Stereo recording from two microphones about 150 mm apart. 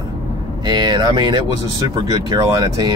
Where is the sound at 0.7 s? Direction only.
25° right (ahead or behind).